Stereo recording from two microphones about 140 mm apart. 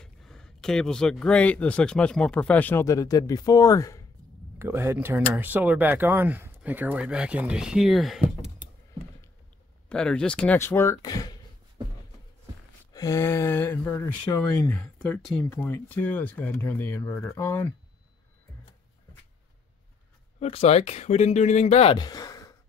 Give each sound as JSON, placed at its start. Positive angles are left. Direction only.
{"t": 0.0, "sound": "speech", "side_deg": 5}
{"t": 4.6, "sound": "speech", "side_deg": -15}
{"t": 9.8, "sound": "speech", "side_deg": 5}
{"t": 12.9, "sound": "speech", "side_deg": 20}
{"t": 14.8, "sound": "speech", "side_deg": 5}
{"t": 15.5, "sound": "speech", "side_deg": 15}
{"t": 20.3, "sound": "speech", "side_deg": 45}
{"t": 21.9, "sound": "a sound", "side_deg": 25}